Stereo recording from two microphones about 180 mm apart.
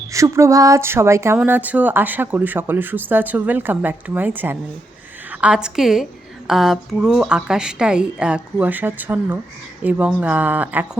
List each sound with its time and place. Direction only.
0.1 s a woman's voice: 15° right (ahead or behind)